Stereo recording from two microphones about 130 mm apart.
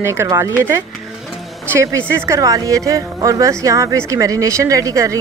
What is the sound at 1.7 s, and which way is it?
Speech, 20° right (ahead or behind).